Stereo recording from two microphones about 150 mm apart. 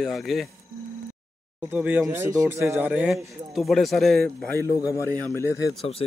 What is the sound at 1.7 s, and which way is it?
Speech, 10° right (ahead or behind).